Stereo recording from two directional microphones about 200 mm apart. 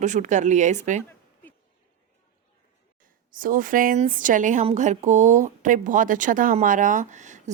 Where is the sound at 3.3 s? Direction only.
45° right (ahead or behind).